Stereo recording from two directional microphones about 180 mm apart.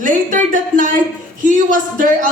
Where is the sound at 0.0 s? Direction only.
45° right (ahead or behind).